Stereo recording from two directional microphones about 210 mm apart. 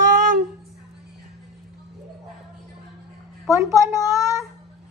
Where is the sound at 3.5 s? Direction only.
15° right (ahead or behind).